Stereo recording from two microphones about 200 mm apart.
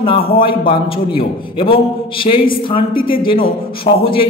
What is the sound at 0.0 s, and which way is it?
A man's voice, 25° left (ahead or behind).